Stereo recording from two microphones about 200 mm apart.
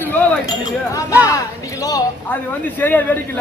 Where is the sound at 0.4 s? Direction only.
20° left (ahead or behind).